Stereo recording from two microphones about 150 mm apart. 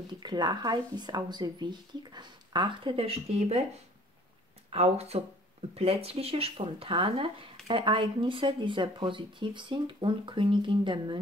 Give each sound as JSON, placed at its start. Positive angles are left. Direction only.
{"t": 0.2, "sound": "speech", "side_deg": -30}
{"t": 4.6, "sound": "speech", "side_deg": -45}